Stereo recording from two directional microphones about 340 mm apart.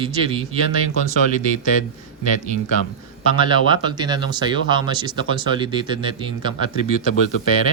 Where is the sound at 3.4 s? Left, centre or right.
Centre.